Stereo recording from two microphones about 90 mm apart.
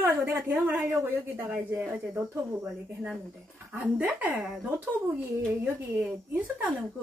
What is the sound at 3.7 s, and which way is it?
Speech, 15° right (ahead or behind).